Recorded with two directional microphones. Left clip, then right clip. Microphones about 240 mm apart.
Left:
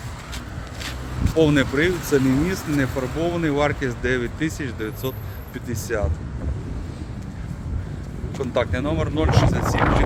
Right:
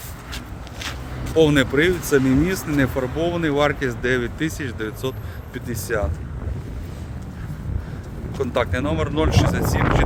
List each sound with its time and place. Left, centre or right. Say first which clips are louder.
1.4 s speech: right 2 dB; right
8.4 s speech: right 1 dB; right